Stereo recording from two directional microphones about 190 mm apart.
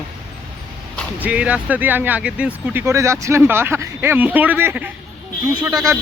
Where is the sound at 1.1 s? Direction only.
5° right (ahead or behind).